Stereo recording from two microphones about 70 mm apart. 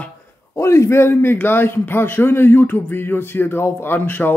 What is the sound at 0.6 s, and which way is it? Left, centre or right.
A man's voice, left.